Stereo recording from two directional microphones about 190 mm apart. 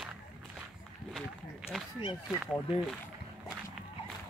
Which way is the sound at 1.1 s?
Centre (ahead or behind).